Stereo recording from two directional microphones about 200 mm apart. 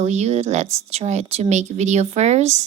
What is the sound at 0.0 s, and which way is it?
A woman's voice, 35° right (ahead or behind).